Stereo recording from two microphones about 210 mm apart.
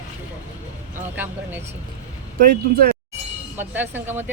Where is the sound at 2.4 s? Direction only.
40° right (ahead or behind).